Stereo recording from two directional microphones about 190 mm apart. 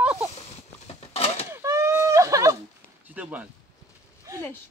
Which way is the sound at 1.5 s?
15° right (ahead or behind).